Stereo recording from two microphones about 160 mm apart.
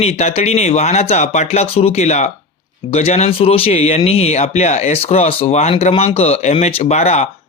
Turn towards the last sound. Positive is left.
turn(degrees=45)  # may be behind; listen again after turning